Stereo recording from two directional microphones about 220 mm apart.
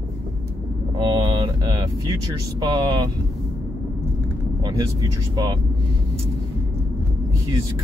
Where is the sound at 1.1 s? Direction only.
15° right (ahead or behind).